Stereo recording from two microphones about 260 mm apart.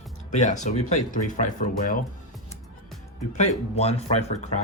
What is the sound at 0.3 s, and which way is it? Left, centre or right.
Speech, left.